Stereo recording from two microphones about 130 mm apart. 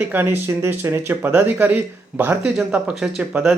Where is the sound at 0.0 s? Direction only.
15° right (ahead or behind).